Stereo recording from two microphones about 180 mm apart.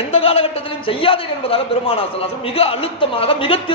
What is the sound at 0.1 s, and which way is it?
A man's voice, 30° left (ahead or behind).